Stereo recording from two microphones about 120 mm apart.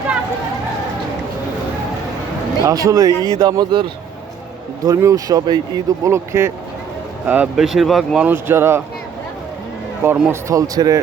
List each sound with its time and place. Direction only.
2.6 s speech: 30° right (ahead or behind)
4.9 s speech: 30° right (ahead or behind)
6.1 s speech: 20° right (ahead or behind)
7.3 s speech: 10° right (ahead or behind)
8.2 s speech: 15° right (ahead or behind)
10.0 s speech: 20° right (ahead or behind)
10.5 s speech: 30° right (ahead or behind)